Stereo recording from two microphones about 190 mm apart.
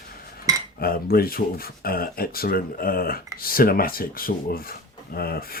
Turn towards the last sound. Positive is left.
turn(degrees=50)  # may be behind; listen again after turning